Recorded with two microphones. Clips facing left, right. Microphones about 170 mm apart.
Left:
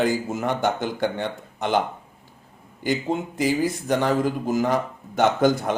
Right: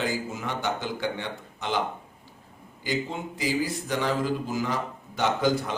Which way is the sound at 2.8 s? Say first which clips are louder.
Left 6 dB; 50° left (ahead or behind).